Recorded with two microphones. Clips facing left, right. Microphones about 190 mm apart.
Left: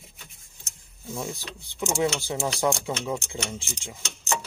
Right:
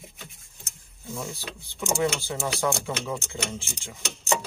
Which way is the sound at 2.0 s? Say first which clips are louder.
Left 2 dB; 15° left (ahead or behind).